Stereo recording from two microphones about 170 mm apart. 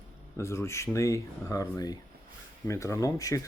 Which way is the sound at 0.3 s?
15° left (ahead or behind).